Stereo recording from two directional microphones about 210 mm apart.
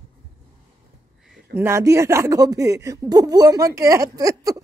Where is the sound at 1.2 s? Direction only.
Centre (ahead or behind).